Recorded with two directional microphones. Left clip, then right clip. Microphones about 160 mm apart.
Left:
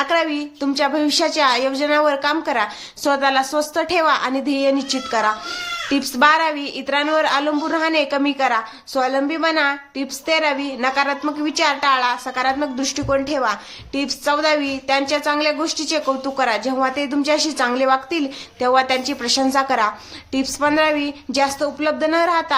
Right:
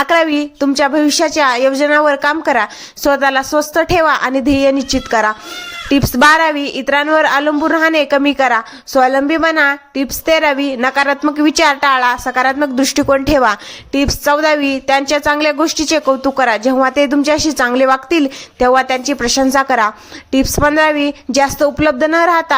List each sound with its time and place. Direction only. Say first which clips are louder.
0.0 s a woman's voice: right 7 dB; 50° right (ahead or behind)